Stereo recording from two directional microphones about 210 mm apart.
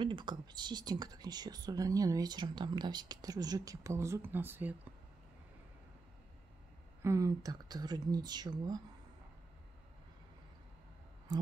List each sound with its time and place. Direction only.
0.0 s speech: 20° right (ahead or behind)
7.0 s speech: 15° right (ahead or behind)